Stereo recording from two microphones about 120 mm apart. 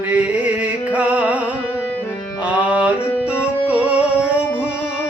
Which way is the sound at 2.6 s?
10° right (ahead or behind).